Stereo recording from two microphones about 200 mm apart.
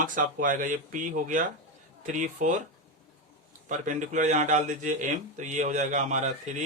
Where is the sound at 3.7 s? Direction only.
40° right (ahead or behind).